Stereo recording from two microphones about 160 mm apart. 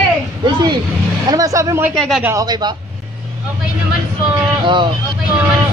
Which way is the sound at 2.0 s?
Centre (ahead or behind).